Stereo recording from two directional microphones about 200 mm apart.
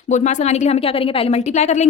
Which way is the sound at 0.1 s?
35° left (ahead or behind).